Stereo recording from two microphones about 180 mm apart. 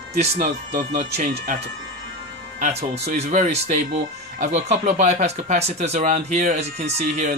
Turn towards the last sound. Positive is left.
turn(degrees=-35)  # may be behind; listen again after turning